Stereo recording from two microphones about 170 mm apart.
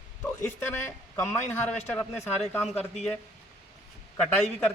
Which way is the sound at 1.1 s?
15° left (ahead or behind).